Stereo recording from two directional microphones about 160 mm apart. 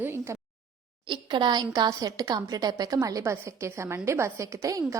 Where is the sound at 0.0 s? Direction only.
15° right (ahead or behind).